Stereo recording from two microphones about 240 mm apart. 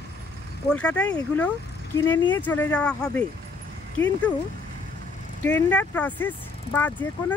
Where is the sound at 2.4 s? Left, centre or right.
Centre.